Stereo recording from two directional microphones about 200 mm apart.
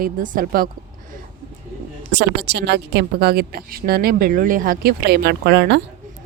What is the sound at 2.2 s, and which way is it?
A woman's voice, 60° right (ahead or behind).